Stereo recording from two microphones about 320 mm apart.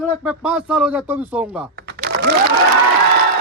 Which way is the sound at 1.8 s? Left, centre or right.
Right.